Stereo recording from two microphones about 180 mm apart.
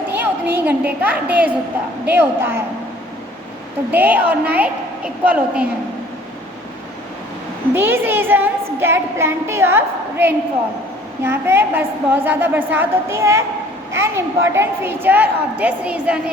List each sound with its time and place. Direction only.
0.2 s a woman's voice: 10° right (ahead or behind)
3.9 s a child's voice: 10° right (ahead or behind)
7.7 s a sound: 10° right (ahead or behind)
11.2 s a child's voice: 15° right (ahead or behind)